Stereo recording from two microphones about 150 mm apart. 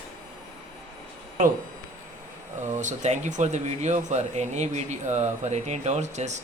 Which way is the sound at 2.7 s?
55° right (ahead or behind).